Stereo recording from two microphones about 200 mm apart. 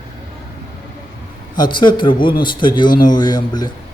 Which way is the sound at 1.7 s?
25° left (ahead or behind).